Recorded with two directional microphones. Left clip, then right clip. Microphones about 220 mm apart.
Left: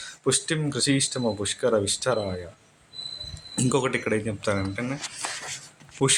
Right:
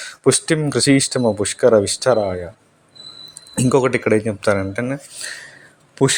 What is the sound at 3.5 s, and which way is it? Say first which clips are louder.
Speech: right 9 dB; 25° right (ahead or behind).